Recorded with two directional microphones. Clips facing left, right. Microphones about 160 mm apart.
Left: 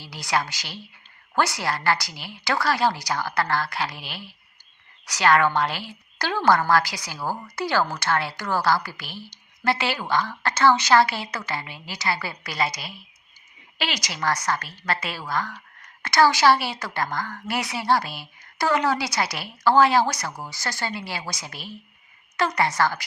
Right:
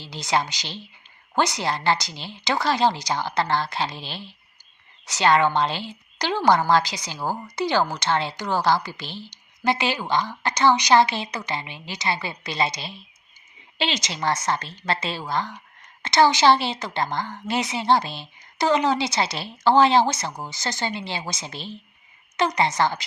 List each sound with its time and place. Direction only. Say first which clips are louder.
0.0 s a woman's voice: right 2 dB; 20° right (ahead or behind)